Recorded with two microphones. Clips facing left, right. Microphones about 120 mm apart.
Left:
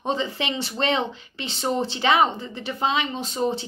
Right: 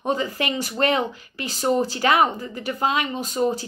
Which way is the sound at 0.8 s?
25° left (ahead or behind).